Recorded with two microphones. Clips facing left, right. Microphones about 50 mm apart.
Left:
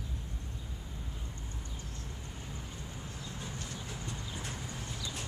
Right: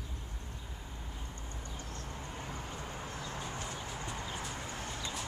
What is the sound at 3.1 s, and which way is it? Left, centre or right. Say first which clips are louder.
Vehicle: right 2 dB; right.